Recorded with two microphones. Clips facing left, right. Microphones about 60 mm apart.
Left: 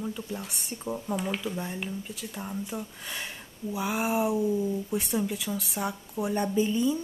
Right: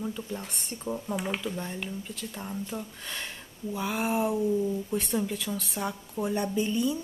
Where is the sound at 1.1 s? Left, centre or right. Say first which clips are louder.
Left 2 dB; centre.